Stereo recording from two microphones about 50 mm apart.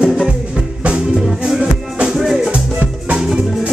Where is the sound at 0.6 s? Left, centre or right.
Centre.